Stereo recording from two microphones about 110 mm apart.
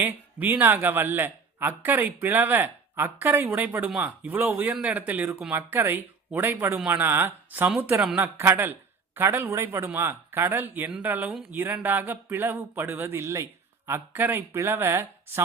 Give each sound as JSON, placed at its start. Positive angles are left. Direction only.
{"t": 0.0, "sound": "speech", "side_deg": -15}